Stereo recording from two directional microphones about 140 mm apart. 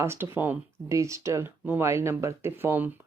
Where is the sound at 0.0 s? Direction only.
20° right (ahead or behind).